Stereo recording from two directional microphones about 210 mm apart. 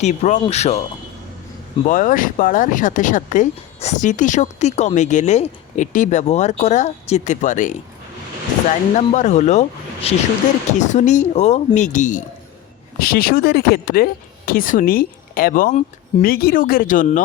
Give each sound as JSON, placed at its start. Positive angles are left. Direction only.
{"t": 0.0, "sound": "speech", "side_deg": 35}
{"t": 1.8, "sound": "speech", "side_deg": 40}
{"t": 9.0, "sound": "speech", "side_deg": 35}